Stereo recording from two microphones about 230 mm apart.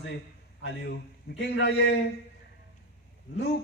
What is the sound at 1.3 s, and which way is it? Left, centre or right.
Speech, left.